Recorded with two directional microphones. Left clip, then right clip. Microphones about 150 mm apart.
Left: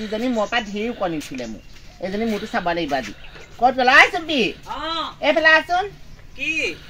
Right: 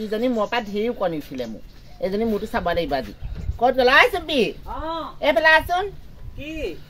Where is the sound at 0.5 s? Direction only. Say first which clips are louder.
Even; 35° right (ahead or behind).